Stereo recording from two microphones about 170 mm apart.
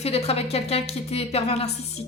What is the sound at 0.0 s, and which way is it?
Speech, 35° left (ahead or behind).